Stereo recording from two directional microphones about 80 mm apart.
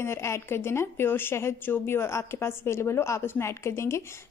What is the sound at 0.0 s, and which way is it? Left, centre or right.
A woman's voice, left.